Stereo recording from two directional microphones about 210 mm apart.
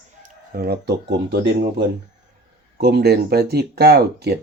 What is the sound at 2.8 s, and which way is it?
Speech, 50° right (ahead or behind).